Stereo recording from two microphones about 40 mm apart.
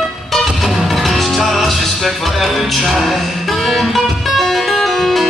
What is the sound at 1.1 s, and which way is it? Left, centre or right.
Music, centre.